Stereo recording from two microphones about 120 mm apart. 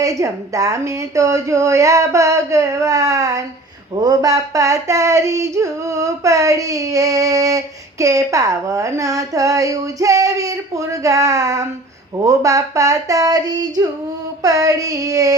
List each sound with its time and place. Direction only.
0.0 s female singing: 25° right (ahead or behind)